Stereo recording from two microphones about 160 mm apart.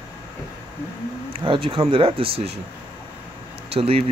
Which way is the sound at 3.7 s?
40° right (ahead or behind).